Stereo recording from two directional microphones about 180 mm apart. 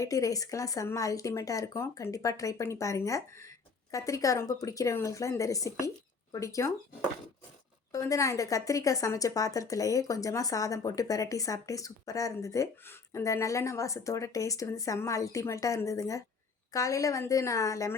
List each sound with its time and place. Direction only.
0.0 s speech: 20° left (ahead or behind)
7.9 s a woman's voice: 15° left (ahead or behind)